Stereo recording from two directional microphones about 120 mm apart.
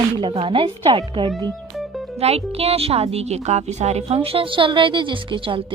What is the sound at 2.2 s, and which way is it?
A woman's voice, 55° right (ahead or behind).